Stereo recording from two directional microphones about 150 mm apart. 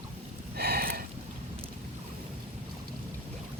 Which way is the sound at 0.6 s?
90° right.